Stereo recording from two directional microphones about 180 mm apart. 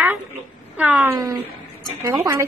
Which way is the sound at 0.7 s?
10° right (ahead or behind).